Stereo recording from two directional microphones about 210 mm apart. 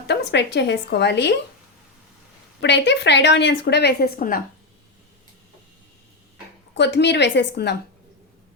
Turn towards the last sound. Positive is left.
turn(degrees=55)  # may be behind; listen again after turning